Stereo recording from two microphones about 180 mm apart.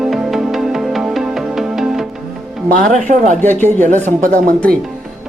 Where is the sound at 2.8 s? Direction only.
45° right (ahead or behind).